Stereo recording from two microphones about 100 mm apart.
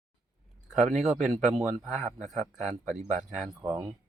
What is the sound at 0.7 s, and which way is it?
Speech, 5° right (ahead or behind).